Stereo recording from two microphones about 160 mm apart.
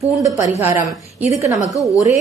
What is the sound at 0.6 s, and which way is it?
A woman's voice, 15° right (ahead or behind).